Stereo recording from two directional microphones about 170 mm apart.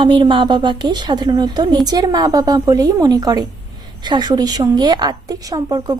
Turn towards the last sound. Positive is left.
turn(degrees=-20)  # may be behind; listen again after turning